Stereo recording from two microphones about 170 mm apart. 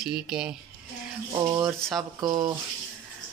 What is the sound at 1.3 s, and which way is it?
Speech, 20° right (ahead or behind).